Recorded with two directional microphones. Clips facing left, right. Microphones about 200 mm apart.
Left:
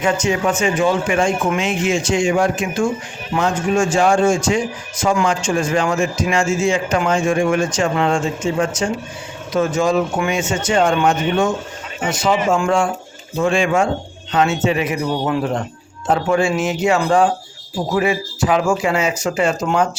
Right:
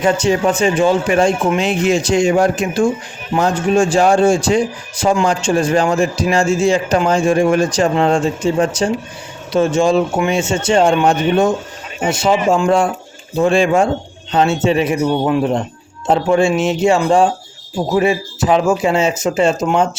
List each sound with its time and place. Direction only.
0.0 s a man's voice: 35° right (ahead or behind)